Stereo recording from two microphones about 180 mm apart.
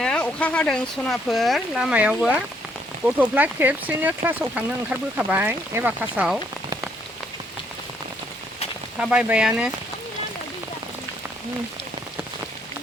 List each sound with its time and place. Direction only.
0.0 s speech: 5° left (ahead or behind)
9.0 s speech: 5° right (ahead or behind)